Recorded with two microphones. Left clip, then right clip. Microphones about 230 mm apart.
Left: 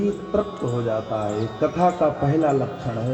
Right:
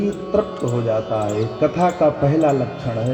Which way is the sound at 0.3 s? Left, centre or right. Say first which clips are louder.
Right 4 dB; right.